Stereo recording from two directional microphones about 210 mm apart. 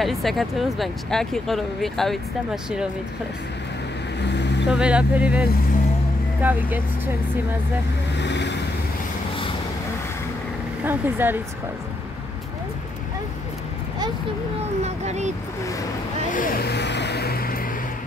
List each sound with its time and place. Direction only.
0.0 s speech: centre (ahead or behind)
4.2 s vehicle: 55° left (ahead or behind)
4.6 s speech: 5° right (ahead or behind)
8.2 s vehicle: 55° left (ahead or behind)
10.8 s speech: 10° right (ahead or behind)
14.8 s speech: 30° right (ahead or behind)
16.3 s vehicle: 40° left (ahead or behind)